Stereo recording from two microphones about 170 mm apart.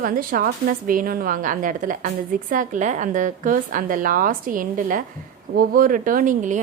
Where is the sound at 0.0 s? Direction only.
55° right (ahead or behind).